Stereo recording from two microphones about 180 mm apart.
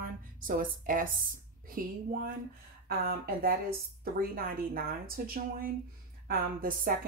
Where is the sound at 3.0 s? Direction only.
55° right (ahead or behind).